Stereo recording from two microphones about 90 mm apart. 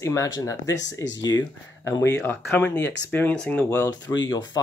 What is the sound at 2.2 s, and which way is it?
Speech, 20° left (ahead or behind).